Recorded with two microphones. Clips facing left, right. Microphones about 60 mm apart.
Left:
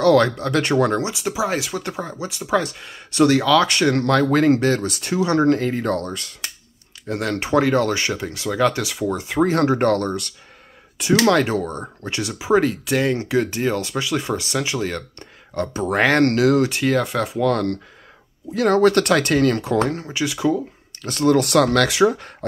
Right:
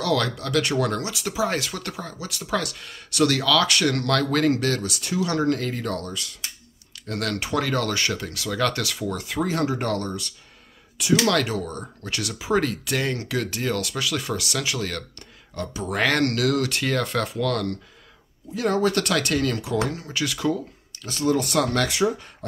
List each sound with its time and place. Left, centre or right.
0.0 s speech: left
7.1 s speech: left
9.4 s speech: left
11.2 s speech: left
15.1 s speech: left
16.0 s speech: left
16.8 s speech: centre
17.4 s speech: left
18.5 s speech: left
20.1 s speech: centre
21.0 s speech: left